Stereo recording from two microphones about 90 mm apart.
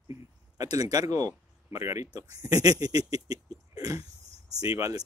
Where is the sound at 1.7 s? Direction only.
30° right (ahead or behind).